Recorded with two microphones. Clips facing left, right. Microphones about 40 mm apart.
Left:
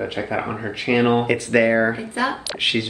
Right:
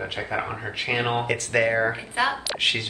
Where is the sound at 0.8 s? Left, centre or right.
Left.